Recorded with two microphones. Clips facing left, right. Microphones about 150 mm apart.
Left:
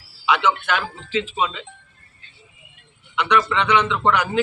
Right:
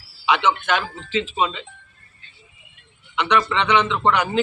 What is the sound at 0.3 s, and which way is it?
Speech, 5° left (ahead or behind).